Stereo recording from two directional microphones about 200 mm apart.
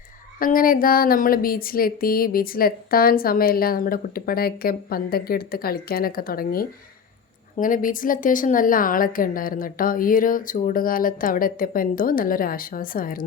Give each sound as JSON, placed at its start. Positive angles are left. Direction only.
{"t": 0.3, "sound": "speech", "side_deg": 45}